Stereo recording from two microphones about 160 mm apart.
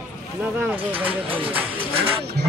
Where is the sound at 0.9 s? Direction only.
35° right (ahead or behind).